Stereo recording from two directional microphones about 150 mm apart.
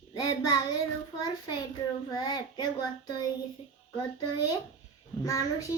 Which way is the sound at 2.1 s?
25° left (ahead or behind).